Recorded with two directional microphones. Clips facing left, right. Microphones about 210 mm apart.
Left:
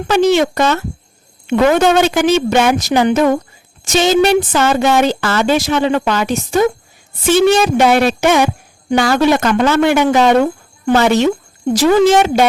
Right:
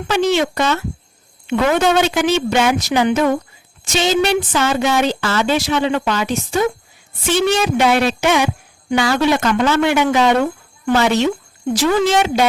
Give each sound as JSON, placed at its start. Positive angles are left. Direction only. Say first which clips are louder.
{"t": 0.1, "sound": "speech", "louder": "left 4 dB", "side_deg": 45}